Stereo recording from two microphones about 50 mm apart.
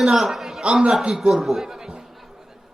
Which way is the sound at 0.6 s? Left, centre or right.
Right.